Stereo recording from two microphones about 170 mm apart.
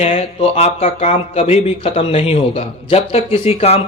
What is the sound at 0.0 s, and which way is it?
Speech, 40° left (ahead or behind).